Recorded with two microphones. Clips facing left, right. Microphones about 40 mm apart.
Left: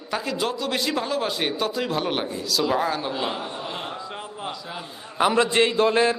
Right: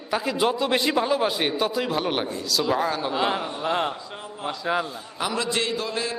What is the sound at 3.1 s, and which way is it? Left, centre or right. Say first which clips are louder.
Speech: right 3 dB; right.